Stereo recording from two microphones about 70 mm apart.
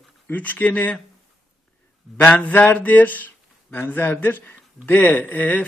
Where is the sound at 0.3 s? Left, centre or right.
Left.